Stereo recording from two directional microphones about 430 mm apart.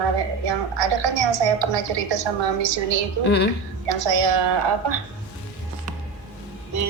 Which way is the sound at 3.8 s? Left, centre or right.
Right.